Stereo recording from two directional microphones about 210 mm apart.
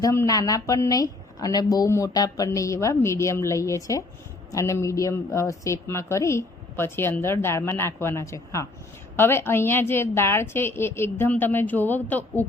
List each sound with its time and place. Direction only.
0.0 s a woman's voice: 15° left (ahead or behind)